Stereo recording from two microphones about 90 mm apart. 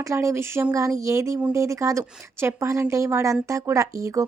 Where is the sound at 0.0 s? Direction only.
35° right (ahead or behind).